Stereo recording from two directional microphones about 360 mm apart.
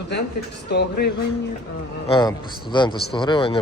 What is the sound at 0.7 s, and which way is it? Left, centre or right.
Speech, left.